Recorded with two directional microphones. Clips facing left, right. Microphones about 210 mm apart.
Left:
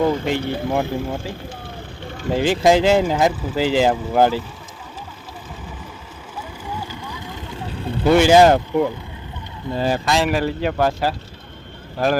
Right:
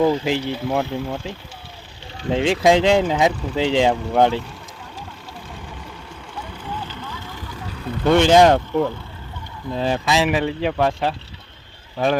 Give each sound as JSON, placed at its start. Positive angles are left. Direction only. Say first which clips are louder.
{"t": 0.0, "sound": "speech", "louder": "right 1 dB", "side_deg": 0}
{"t": 2.3, "sound": "speech", "louder": "even", "side_deg": 0}
{"t": 6.7, "sound": "vehicle", "louder": "left 1 dB", "side_deg": 10}
{"t": 8.0, "sound": "speech", "louder": "left 1 dB", "side_deg": 5}